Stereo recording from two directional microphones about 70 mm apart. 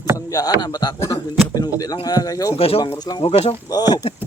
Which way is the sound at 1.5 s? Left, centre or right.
Left.